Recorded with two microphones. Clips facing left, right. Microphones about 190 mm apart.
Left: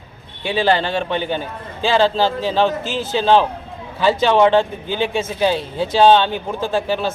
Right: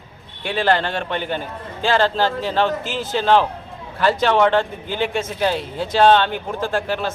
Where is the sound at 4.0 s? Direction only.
Centre (ahead or behind).